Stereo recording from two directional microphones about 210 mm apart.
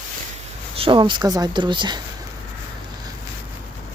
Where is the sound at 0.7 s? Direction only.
25° right (ahead or behind).